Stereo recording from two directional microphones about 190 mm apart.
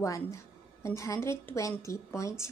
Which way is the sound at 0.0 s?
15° left (ahead or behind).